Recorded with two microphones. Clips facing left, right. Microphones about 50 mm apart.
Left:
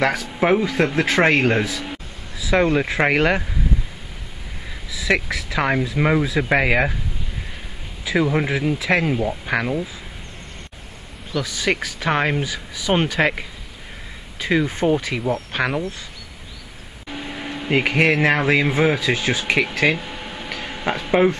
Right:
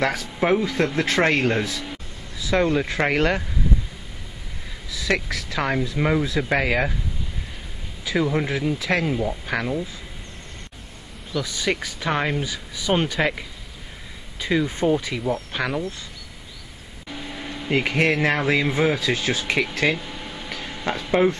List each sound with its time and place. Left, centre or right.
0.0 s speech: centre
4.9 s speech: left
8.0 s speech: left
11.3 s speech: left
15.0 s speech: left
15.5 s insect: left
17.1 s speech: left